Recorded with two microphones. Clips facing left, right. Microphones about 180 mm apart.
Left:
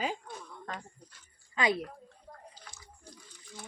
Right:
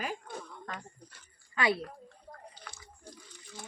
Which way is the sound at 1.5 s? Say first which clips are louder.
Even; 20° left (ahead or behind).